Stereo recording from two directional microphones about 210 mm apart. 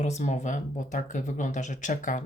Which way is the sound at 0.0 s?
35° left (ahead or behind).